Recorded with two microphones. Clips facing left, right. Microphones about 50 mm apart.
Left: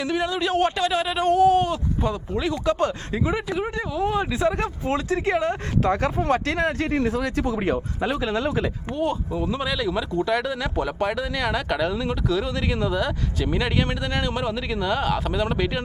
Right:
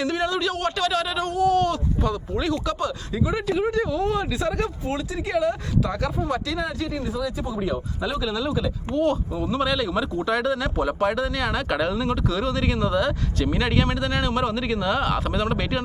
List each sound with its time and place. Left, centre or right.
0.0 s speech: centre
0.4 s speech: left
1.3 s speech: left
1.5 s speech: centre
2.7 s speech: left
3.3 s speech: centre; by 4.9 s left
4.9 s speech: left
9.0 s speech: centre